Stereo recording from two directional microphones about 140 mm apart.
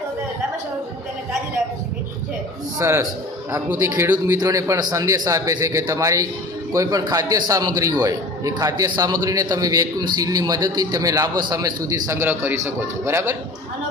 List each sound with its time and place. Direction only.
2.7 s a man's voice: 20° right (ahead or behind)